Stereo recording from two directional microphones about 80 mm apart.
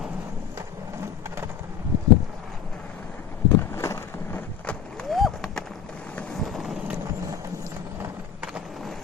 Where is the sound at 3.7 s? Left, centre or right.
Left.